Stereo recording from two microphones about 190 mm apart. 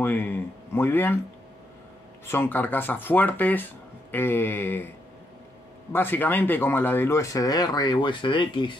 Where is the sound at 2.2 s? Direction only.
10° left (ahead or behind).